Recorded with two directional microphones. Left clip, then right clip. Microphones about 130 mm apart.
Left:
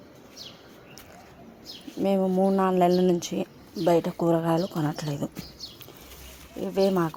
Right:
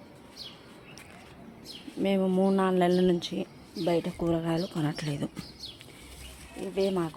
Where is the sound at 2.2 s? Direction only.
10° right (ahead or behind).